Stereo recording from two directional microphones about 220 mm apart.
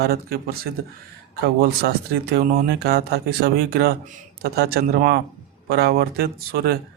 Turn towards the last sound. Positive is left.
turn(degrees=-45)  # may be behind; listen again after turning